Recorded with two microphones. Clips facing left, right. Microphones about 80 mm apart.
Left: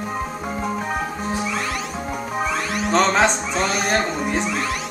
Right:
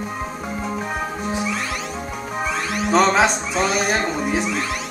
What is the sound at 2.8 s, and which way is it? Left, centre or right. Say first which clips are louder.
Speech: right 1 dB; centre.